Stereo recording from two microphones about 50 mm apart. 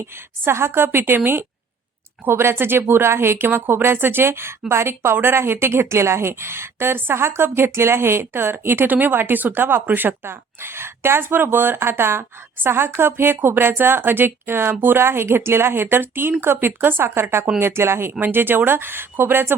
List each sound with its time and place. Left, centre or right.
0.0 s speech: right
10.6 s speech: right
18.1 s speech: right